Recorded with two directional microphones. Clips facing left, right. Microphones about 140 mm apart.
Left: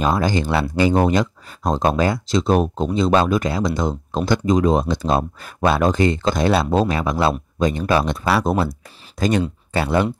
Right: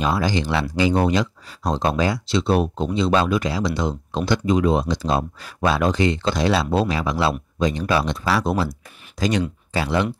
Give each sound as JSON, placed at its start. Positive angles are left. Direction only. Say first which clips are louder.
{"t": 0.0, "sound": "speech", "louder": "left 2 dB", "side_deg": 45}